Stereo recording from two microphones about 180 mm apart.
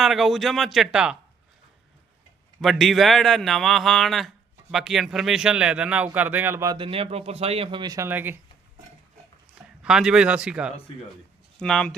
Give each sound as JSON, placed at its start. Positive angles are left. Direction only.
{"t": 0.0, "sound": "a man's voice", "side_deg": 0}
{"t": 2.6, "sound": "a man's voice", "side_deg": 0}
{"t": 9.8, "sound": "a man's voice", "side_deg": -5}